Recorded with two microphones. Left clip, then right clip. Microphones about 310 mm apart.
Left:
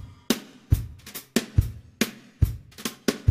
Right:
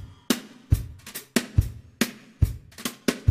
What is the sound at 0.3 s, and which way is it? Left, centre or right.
Music, centre.